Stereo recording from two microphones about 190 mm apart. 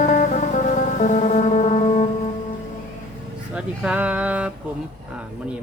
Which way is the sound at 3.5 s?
5° right (ahead or behind).